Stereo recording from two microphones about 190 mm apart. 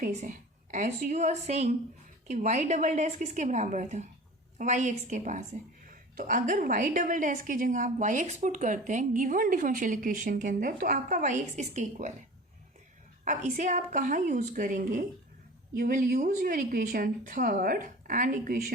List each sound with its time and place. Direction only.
0.0 s a woman's voice: 40° right (ahead or behind)
13.2 s a woman's voice: 40° right (ahead or behind)